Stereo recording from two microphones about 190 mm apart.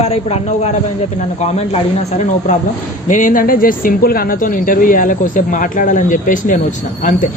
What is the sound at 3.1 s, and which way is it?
Speech, 45° left (ahead or behind).